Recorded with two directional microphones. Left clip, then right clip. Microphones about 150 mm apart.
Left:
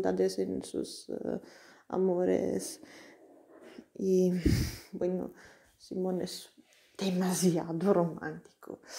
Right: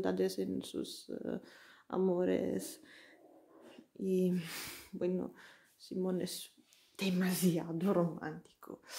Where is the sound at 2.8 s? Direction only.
20° left (ahead or behind).